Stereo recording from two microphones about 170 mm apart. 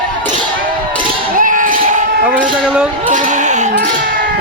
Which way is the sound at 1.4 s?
50° right (ahead or behind).